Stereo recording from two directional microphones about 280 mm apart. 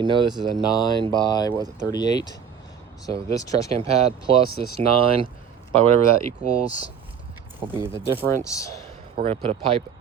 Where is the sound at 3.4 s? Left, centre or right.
Centre.